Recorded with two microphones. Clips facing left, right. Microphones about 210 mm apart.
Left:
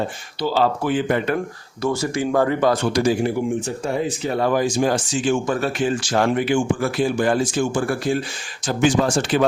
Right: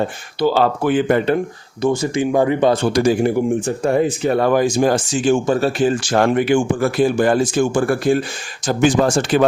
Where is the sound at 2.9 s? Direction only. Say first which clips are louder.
Right 4 dB; 50° right (ahead or behind).